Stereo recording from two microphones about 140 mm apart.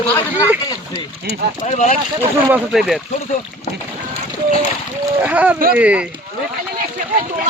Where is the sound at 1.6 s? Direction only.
60° left (ahead or behind).